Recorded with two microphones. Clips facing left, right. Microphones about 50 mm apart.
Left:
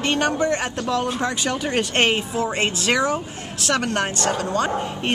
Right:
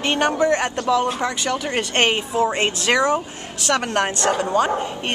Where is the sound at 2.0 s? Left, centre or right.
Centre.